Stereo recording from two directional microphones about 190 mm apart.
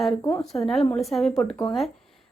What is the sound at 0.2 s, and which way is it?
Speech, 15° left (ahead or behind).